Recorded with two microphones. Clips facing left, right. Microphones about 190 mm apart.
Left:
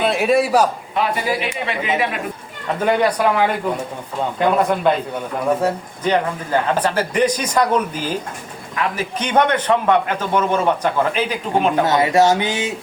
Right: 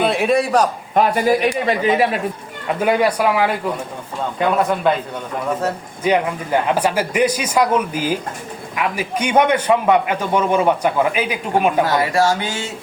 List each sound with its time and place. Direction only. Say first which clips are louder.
0.0 s a man's voice: even; centre (ahead or behind)
0.9 s a man's voice: right 7 dB; 45° right (ahead or behind)
2.8 s a man's voice: even; 10° right (ahead or behind)
6.0 s a man's voice: right 2 dB; 10° right (ahead or behind)
11.9 s speech: left 2 dB; 20° left (ahead or behind)